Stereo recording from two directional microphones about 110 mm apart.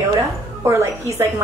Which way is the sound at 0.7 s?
25° right (ahead or behind).